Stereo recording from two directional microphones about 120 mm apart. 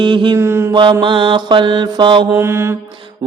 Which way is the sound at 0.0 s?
40° right (ahead or behind).